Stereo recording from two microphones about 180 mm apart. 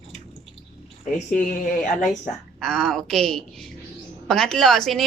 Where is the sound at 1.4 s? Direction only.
45° left (ahead or behind).